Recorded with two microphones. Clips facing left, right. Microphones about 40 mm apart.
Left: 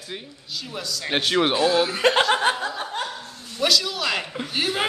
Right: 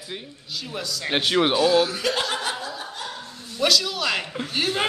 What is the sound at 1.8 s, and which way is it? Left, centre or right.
Speech, left.